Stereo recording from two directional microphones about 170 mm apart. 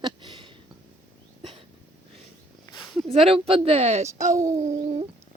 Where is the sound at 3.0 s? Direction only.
35° right (ahead or behind).